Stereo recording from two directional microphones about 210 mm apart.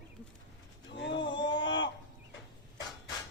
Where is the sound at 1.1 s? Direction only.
20° left (ahead or behind).